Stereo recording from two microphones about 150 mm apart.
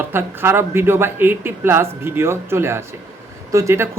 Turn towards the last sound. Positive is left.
turn(degrees=-20)  # may be behind; listen again after turning